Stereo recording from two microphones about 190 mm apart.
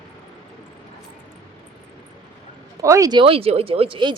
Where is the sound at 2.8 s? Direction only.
15° right (ahead or behind).